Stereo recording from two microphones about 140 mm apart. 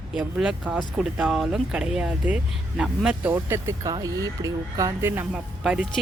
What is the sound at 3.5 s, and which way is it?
A man's voice, 20° right (ahead or behind).